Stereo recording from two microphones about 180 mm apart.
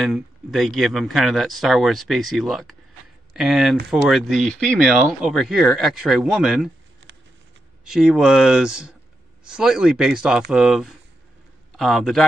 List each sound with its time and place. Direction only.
0.0 s speech: centre (ahead or behind)
7.8 s a man's voice: 5° right (ahead or behind)